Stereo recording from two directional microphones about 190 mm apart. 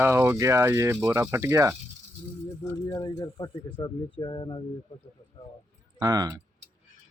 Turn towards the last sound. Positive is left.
turn(degrees=-20)  # may be behind; listen again after turning